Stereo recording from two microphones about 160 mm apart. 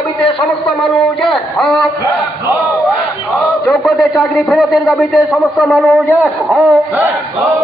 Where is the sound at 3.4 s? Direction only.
Centre (ahead or behind).